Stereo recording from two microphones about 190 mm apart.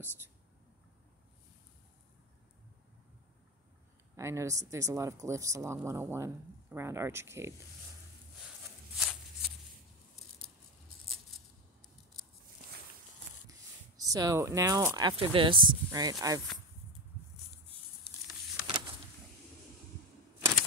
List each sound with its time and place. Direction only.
4.2 s speech: 15° right (ahead or behind)
8.9 s a sound: centre (ahead or behind)
13.9 s speech: 20° right (ahead or behind)